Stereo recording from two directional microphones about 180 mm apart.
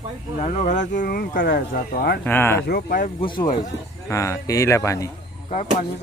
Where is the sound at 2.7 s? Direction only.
55° left (ahead or behind).